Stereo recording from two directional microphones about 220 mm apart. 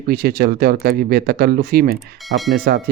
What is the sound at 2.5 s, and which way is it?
Speech, 40° right (ahead or behind).